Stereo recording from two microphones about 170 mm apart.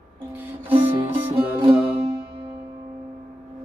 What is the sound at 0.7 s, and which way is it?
Music, 30° right (ahead or behind).